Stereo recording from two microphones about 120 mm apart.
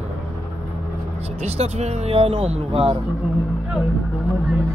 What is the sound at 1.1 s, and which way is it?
Speech, 60° right (ahead or behind).